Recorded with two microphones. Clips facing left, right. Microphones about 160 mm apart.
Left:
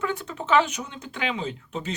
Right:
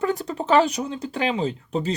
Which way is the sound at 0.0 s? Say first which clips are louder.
Right 5 dB; 40° right (ahead or behind).